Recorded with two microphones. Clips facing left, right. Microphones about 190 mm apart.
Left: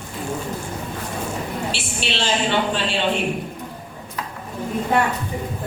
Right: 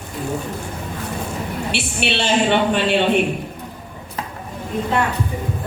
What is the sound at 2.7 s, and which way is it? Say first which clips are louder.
Speech: right 6 dB; 60° right (ahead or behind).